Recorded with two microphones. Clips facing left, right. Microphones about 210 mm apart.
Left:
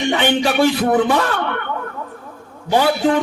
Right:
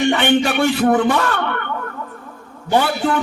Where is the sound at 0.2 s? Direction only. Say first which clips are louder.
Even; 40° left (ahead or behind).